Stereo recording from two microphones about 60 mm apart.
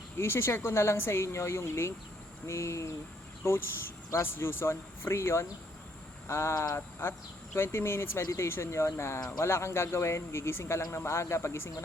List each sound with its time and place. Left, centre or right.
0.2 s speech: left
6.7 s speech: left
8.2 s speech: left
8.4 s speech: left